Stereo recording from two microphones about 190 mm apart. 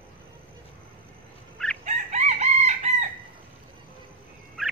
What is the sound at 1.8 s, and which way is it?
Chicken, 35° right (ahead or behind).